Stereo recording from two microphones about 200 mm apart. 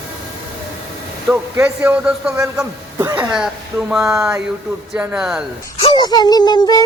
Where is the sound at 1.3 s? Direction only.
10° right (ahead or behind).